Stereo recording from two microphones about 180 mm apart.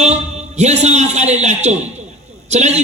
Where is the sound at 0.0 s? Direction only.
40° right (ahead or behind).